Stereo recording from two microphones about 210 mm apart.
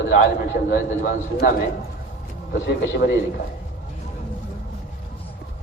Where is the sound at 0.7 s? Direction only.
45° left (ahead or behind).